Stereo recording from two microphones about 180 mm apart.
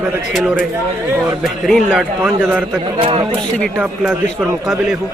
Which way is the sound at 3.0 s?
30° right (ahead or behind).